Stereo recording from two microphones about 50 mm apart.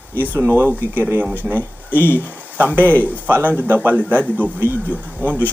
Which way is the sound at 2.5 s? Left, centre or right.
Right.